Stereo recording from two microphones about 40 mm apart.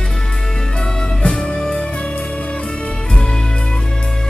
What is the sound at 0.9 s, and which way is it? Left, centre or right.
Music, centre.